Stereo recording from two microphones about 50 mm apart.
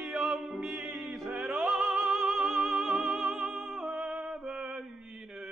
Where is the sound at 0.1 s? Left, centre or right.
Centre.